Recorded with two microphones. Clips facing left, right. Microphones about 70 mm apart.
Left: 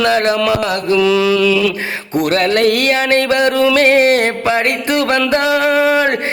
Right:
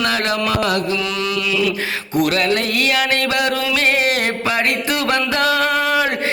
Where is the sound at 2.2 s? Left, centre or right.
Left.